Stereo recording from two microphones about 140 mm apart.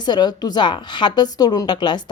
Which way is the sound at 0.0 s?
30° left (ahead or behind).